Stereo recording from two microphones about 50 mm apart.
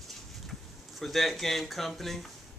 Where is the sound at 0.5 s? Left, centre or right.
Centre.